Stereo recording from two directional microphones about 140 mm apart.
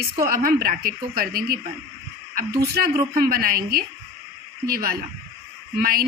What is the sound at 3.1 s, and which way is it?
A woman's voice, 90° right.